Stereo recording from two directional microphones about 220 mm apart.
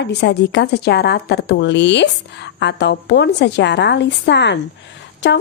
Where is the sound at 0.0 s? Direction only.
50° left (ahead or behind).